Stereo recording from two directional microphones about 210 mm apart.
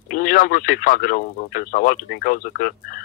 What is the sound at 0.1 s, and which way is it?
Speech, 40° left (ahead or behind).